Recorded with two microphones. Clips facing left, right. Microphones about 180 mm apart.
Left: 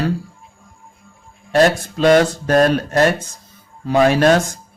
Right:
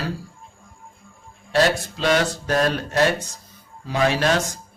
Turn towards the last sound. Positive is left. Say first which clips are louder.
# left 7 dB
turn(degrees=50)  # may be behind; listen again after turning